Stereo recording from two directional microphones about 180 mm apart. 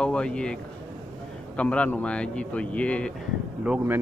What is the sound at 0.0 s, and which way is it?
Speech, 5° left (ahead or behind).